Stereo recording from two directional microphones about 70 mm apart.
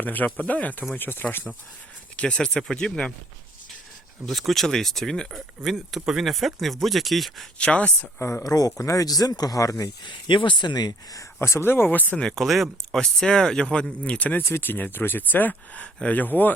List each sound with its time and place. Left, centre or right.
0.0 s speech: left
2.1 s speech: centre
4.3 s speech: centre
5.3 s speech: centre
7.6 s speech: centre
8.2 s speech: left
8.4 s speech: left
10.6 s speech: left
11.2 s speech: left
12.2 s speech: centre; by 14.4 s left
14.4 s speech: left